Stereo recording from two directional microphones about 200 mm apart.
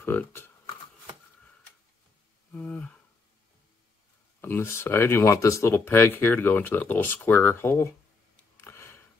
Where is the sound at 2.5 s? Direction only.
5° left (ahead or behind).